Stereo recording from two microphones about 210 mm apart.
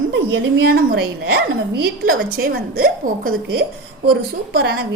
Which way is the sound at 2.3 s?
45° right (ahead or behind).